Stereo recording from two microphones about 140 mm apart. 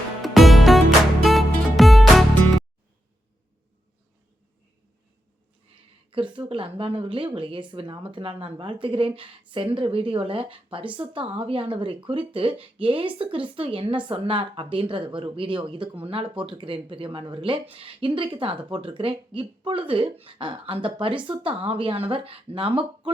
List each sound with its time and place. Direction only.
0.2 s music: centre (ahead or behind)
6.1 s speech: 35° right (ahead or behind)